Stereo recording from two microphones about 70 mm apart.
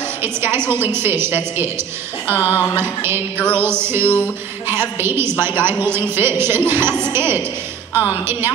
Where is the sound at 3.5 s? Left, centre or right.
Right.